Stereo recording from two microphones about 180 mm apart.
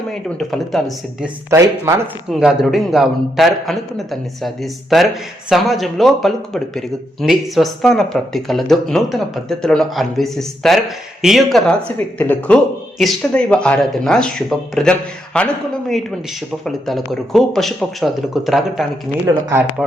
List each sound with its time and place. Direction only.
0.1 s a man's voice: centre (ahead or behind)
1.5 s speech: 15° right (ahead or behind)
2.3 s a man's voice: 5° right (ahead or behind)
19.2 s speech: 15° right (ahead or behind)